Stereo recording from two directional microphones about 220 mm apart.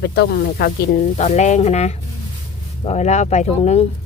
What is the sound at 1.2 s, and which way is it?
Speech, 30° left (ahead or behind).